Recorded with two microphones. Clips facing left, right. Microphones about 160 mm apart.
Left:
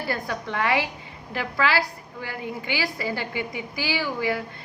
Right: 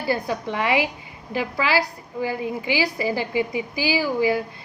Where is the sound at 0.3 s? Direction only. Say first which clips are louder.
Right 2 dB; 20° right (ahead or behind).